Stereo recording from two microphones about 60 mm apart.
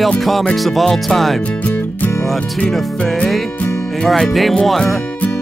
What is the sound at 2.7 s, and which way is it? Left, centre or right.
Speech, centre.